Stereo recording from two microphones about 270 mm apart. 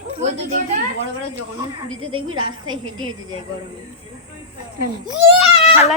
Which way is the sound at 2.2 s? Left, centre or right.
Right.